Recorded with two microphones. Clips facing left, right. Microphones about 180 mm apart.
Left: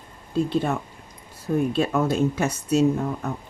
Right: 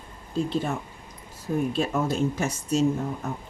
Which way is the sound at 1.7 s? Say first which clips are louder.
Left 3 dB; 65° left (ahead or behind).